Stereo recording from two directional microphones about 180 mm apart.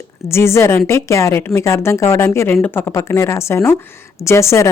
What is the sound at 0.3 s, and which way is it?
A woman's voice, 15° left (ahead or behind).